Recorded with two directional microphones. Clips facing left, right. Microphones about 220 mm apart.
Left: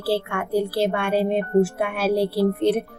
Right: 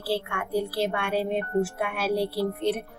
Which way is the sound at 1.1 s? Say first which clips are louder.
Left 5 dB; 90° left.